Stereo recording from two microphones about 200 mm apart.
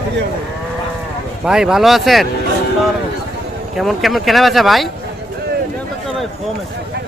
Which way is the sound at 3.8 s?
Centre (ahead or behind).